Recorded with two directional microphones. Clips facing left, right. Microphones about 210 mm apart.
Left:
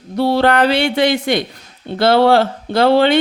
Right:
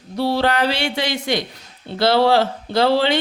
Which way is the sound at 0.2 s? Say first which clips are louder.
Left 5 dB; 55° left (ahead or behind).